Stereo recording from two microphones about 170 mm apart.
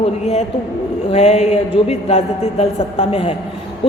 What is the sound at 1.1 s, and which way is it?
A man's voice, 35° left (ahead or behind).